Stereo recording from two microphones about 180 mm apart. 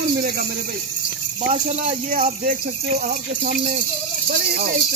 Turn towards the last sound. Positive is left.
turn(degrees=-55)  # may be behind; listen again after turning